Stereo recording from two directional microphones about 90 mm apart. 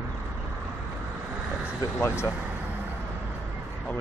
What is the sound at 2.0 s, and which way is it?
Speech, 30° left (ahead or behind).